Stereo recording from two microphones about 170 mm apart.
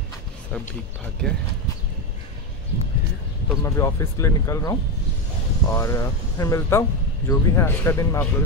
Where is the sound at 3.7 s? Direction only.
20° left (ahead or behind).